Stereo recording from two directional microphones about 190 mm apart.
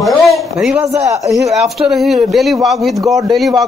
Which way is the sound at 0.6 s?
Centre (ahead or behind).